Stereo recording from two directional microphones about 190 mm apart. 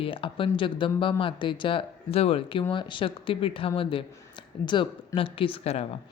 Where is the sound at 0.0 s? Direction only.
25° left (ahead or behind).